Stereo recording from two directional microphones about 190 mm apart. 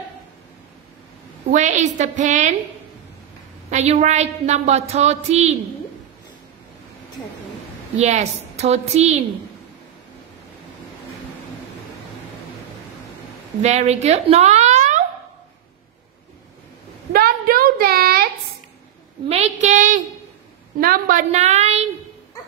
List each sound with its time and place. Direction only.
1.5 s a woman's voice: 40° right (ahead or behind)
3.7 s a woman's voice: 35° right (ahead or behind)
8.0 s a woman's voice: 35° right (ahead or behind)
13.6 s speech: 35° right (ahead or behind)
17.1 s a sound: 50° right (ahead or behind)
19.2 s child singing: 35° right (ahead or behind)
20.8 s a woman's voice: 45° right (ahead or behind)